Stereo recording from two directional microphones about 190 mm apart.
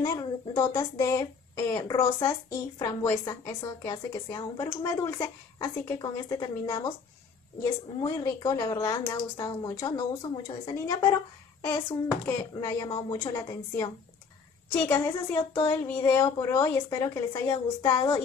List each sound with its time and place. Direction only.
0.0 s a woman's voice: 20° left (ahead or behind)
8.0 s a woman's voice: 20° left (ahead or behind)
12.3 s a woman's voice: 15° left (ahead or behind)